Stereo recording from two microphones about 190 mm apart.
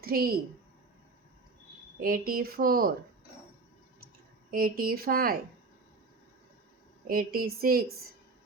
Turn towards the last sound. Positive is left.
turn(degrees=-50)  # may be behind; listen again after turning